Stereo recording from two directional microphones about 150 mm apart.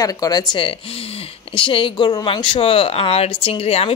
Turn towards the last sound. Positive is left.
turn(degrees=40)  # may be behind; listen again after turning